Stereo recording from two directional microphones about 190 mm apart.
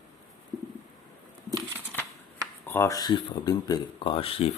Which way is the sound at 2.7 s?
15° left (ahead or behind).